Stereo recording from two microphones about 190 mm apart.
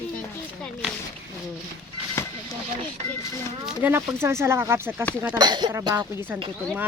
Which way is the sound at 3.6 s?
10° right (ahead or behind).